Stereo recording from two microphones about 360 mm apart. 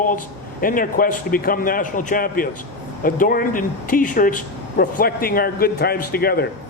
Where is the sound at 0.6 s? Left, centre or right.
Left.